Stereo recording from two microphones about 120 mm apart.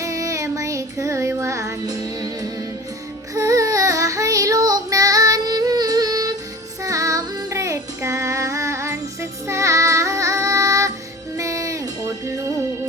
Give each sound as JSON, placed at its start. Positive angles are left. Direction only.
{"t": 0.0, "sound": "child singing", "side_deg": -25}
{"t": 11.3, "sound": "music", "side_deg": -25}